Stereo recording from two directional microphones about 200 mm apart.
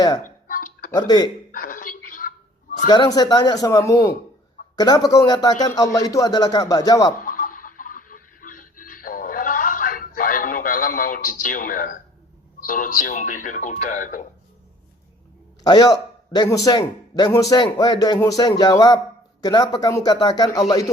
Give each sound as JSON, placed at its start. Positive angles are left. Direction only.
{"t": 0.2, "sound": "music", "side_deg": 45}
{"t": 0.9, "sound": "speech", "side_deg": 20}
{"t": 1.5, "sound": "a sound", "side_deg": 45}
{"t": 2.8, "sound": "a man's voice", "side_deg": 20}
{"t": 7.2, "sound": "a sound", "side_deg": 45}
{"t": 12.5, "sound": "speech", "side_deg": 40}
{"t": 15.6, "sound": "a man's voice", "side_deg": 20}